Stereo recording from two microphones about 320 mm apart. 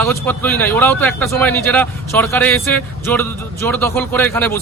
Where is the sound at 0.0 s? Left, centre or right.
Centre.